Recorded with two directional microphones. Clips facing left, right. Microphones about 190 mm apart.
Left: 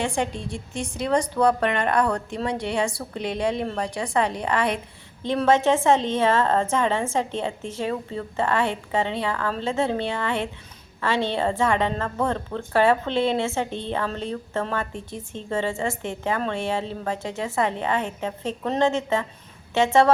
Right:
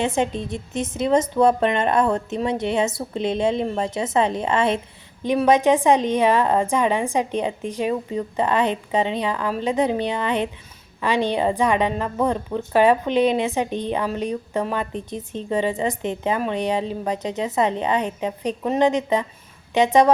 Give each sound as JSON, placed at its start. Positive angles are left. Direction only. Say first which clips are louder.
{"t": 0.0, "sound": "a woman's voice", "louder": "right 4 dB", "side_deg": -20}